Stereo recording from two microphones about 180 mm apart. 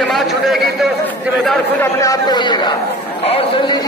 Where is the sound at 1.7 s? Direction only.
20° left (ahead or behind).